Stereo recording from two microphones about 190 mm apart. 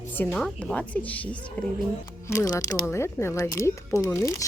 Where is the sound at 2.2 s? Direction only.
20° left (ahead or behind).